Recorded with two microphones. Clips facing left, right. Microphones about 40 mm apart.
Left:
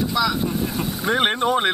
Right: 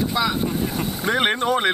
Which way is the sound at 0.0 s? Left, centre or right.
Right.